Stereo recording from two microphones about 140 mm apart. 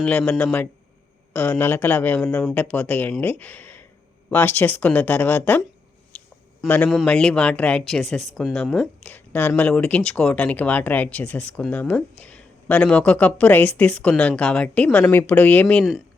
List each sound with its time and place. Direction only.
0.0 s speech: 10° left (ahead or behind)
6.7 s speech: 10° left (ahead or behind)